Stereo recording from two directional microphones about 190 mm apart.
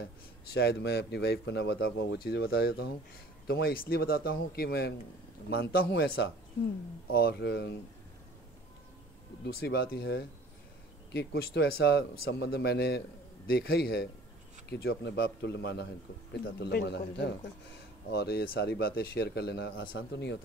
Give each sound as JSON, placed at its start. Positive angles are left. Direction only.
{"t": 0.5, "sound": "speech", "side_deg": 60}
{"t": 9.4, "sound": "speech", "side_deg": 60}